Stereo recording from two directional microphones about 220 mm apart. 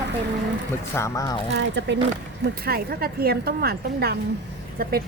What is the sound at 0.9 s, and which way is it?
Speech, 15° left (ahead or behind).